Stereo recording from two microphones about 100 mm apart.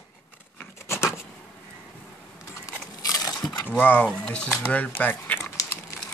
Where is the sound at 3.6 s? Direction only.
20° left (ahead or behind).